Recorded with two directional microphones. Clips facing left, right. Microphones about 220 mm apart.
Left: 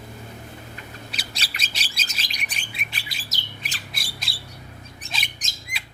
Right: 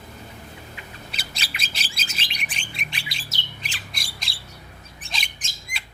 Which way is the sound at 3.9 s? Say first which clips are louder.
Left 2 dB; centre (ahead or behind).